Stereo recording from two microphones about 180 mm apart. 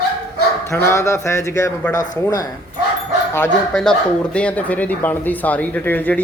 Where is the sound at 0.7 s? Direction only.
15° left (ahead or behind).